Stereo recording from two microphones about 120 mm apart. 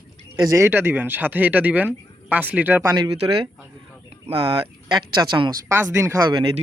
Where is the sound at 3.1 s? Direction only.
55° right (ahead or behind).